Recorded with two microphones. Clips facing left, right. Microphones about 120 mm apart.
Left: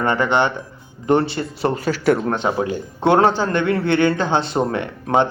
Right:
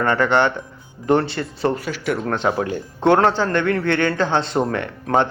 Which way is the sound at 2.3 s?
Centre (ahead or behind).